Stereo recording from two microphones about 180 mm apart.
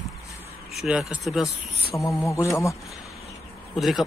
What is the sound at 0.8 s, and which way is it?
Speech, 5° right (ahead or behind).